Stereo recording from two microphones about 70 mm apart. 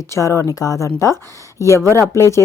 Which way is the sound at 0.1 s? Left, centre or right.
Left.